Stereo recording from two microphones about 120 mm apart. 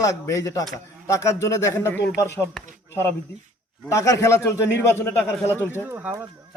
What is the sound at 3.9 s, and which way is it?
A man's voice, 25° left (ahead or behind).